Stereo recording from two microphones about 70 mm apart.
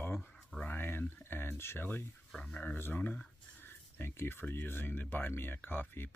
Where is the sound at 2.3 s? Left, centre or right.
Centre.